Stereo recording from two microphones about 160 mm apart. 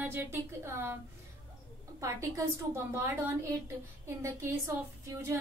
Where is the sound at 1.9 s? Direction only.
20° right (ahead or behind).